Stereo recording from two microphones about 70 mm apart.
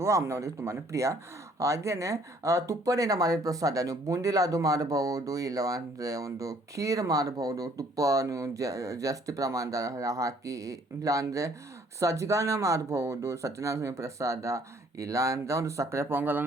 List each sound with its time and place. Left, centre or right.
0.0 s speech: right